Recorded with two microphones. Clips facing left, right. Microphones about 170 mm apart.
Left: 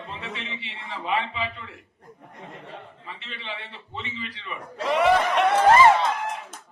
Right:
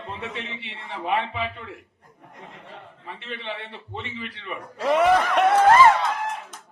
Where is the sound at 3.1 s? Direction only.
60° right (ahead or behind).